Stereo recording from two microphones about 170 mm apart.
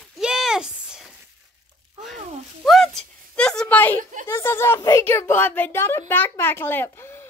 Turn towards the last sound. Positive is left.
turn(degrees=10)  # may be behind; listen again after turning